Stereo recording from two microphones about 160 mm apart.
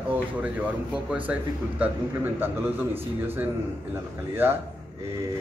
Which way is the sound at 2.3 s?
15° right (ahead or behind).